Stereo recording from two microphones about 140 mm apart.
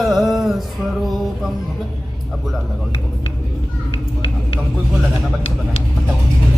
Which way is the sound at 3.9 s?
40° left (ahead or behind).